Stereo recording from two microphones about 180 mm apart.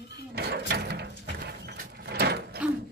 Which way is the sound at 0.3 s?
65° right (ahead or behind).